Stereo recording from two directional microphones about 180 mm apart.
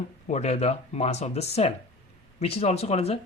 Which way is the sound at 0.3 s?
40° left (ahead or behind).